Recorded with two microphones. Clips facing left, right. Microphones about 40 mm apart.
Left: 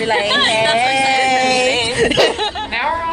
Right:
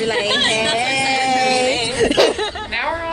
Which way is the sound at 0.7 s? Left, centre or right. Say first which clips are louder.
Left 4 dB; left.